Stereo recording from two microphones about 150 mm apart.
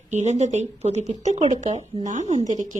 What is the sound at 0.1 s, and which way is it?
A woman's voice, 50° right (ahead or behind).